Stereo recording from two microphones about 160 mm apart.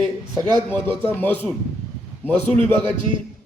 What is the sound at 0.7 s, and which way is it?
A man's voice, 10° left (ahead or behind).